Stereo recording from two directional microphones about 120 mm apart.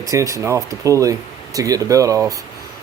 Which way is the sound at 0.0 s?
25° right (ahead or behind).